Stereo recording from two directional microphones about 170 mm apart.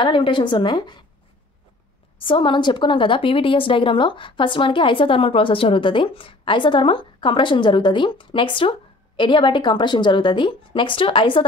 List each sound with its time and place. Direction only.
0.0 s a woman's voice: 30° left (ahead or behind)
2.1 s a woman's voice: 30° left (ahead or behind)